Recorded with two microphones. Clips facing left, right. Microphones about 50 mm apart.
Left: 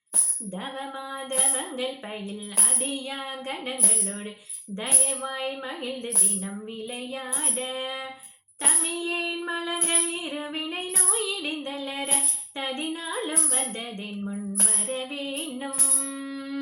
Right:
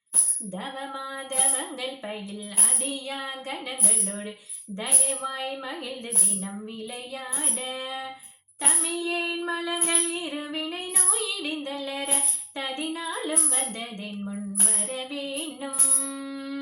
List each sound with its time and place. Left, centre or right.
0.8 s a woman's voice: left
3.2 s a woman's voice: left
4.9 s a woman's voice: centre
5.3 s a woman's voice: left
7.5 s a woman's voice: left
8.8 s child singing: left
9.5 s a sound: centre
10.5 s music: left
14.8 s music: left